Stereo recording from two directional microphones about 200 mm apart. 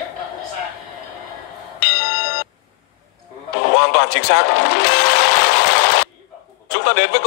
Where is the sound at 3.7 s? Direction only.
55° left (ahead or behind).